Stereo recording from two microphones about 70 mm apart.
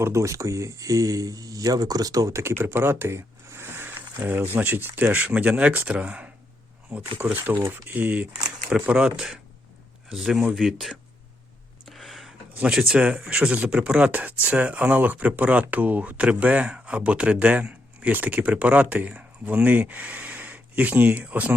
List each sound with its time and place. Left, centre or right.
0.0 s speech: right
2.4 s speech: right
7.3 s speech: right; by 10.9 s centre
11.9 s a sound: centre
12.6 s speech: centre